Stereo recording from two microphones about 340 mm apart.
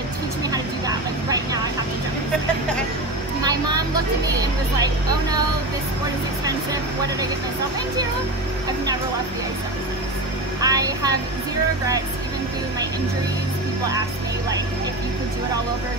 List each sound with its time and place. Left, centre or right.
0.5 s vehicle: centre
3.4 s speech: centre
6.4 s speech: centre
10.6 s speech: centre